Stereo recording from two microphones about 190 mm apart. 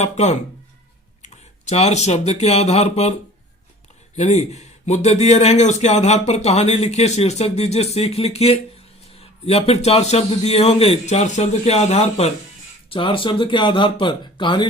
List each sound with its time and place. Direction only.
0.0 s speech: 35° left (ahead or behind)